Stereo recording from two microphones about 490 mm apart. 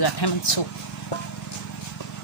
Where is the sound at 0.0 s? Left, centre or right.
Left.